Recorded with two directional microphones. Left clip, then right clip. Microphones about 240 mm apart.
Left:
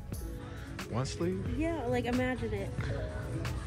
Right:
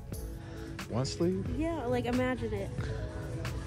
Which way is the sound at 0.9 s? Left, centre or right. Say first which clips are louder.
Right 3 dB; centre.